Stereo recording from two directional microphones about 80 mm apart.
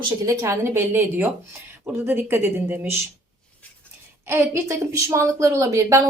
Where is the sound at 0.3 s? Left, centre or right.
Right.